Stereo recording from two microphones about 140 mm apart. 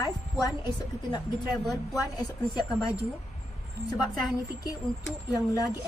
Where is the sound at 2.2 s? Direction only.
30° left (ahead or behind).